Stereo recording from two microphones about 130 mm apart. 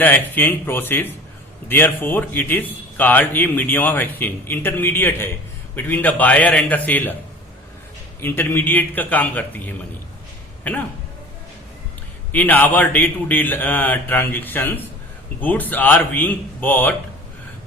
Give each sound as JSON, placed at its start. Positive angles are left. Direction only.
{"t": 0.0, "sound": "a man's voice", "side_deg": 15}
{"t": 8.2, "sound": "a man's voice", "side_deg": 15}
{"t": 12.3, "sound": "a man's voice", "side_deg": 10}